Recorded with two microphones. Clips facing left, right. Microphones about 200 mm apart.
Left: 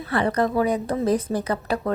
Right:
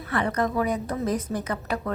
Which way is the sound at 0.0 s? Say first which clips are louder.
Left 4 dB; 30° left (ahead or behind).